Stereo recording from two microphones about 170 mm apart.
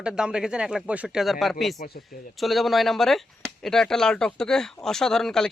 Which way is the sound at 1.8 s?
65° left (ahead or behind).